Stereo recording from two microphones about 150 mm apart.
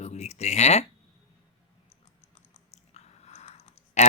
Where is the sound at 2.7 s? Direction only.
45° left (ahead or behind).